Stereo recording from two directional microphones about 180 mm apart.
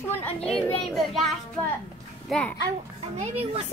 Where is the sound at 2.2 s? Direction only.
5° left (ahead or behind).